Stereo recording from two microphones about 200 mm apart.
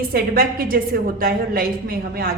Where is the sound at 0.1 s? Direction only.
45° right (ahead or behind).